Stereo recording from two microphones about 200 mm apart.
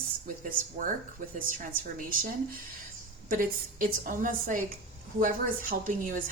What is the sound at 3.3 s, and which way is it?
A woman's voice, 45° right (ahead or behind).